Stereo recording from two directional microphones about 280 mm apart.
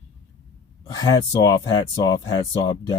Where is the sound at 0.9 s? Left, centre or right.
Centre.